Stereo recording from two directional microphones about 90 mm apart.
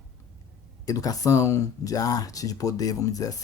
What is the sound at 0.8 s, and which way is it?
Speech, 40° left (ahead or behind).